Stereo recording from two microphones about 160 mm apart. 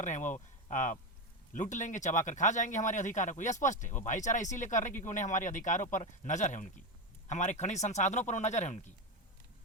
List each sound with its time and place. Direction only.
0.3 s speech: 50° left (ahead or behind)